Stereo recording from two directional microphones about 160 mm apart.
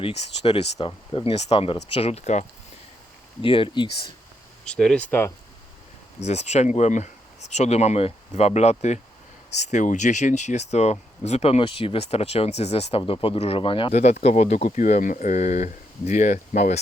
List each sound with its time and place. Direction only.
0.0 s speech: 35° left (ahead or behind)
3.4 s speech: 35° left (ahead or behind)
4.6 s speech: 5° left (ahead or behind)
6.1 s speech: 45° left (ahead or behind)